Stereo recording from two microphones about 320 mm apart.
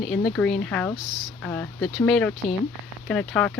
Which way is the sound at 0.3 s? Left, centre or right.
Centre.